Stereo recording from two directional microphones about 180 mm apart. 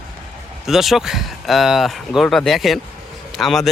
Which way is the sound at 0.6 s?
Centre (ahead or behind).